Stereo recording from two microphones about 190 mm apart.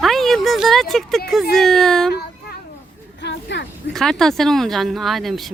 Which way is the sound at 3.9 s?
Centre (ahead or behind).